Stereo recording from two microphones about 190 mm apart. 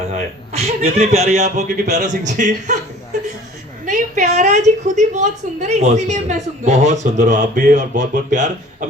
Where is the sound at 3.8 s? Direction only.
40° right (ahead or behind).